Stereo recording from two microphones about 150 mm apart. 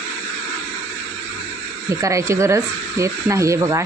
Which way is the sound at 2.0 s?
20° right (ahead or behind).